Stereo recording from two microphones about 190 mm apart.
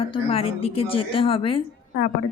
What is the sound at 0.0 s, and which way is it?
Speech, 30° left (ahead or behind).